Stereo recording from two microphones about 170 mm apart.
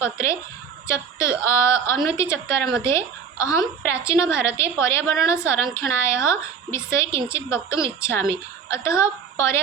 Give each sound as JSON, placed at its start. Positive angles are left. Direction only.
{"t": 0.0, "sound": "a woman's voice", "side_deg": 15}